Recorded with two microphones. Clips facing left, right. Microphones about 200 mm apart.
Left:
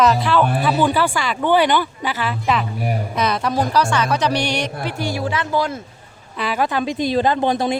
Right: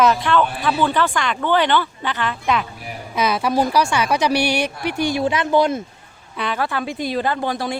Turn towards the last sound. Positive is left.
turn(degrees=20)  # may be behind; listen again after turning